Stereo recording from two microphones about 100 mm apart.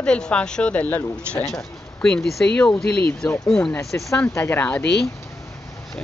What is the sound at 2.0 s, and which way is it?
Speech, 5° left (ahead or behind).